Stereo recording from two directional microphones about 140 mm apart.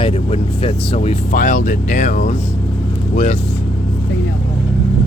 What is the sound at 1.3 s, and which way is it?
Speech, 70° left (ahead or behind).